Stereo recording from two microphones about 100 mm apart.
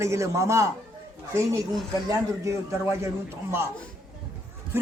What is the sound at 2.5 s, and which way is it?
A man's voice, 25° right (ahead or behind).